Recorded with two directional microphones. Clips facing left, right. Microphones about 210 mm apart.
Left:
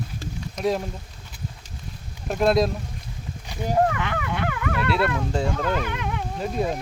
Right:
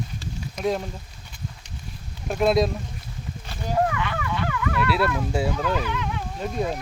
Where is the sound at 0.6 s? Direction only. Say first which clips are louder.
Left 1 dB; centre (ahead or behind).